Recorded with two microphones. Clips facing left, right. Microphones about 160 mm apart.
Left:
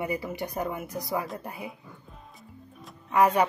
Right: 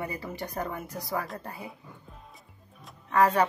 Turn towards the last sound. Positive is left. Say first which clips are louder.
# left 1 dB
turn(degrees=15)  # may be behind; listen again after turning